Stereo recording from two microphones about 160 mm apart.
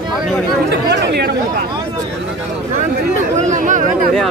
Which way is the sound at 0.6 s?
90° right.